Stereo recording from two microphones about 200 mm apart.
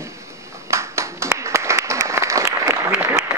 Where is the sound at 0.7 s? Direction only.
15° right (ahead or behind).